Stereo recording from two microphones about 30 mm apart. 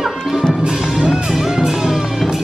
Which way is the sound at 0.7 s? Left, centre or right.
Right.